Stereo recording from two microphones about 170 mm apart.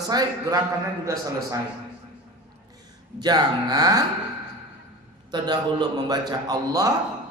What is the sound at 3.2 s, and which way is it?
Speech, 25° right (ahead or behind).